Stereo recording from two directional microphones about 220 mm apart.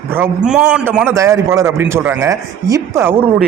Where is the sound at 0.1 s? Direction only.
5° right (ahead or behind).